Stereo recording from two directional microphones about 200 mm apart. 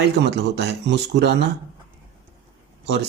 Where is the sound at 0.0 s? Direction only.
60° right (ahead or behind).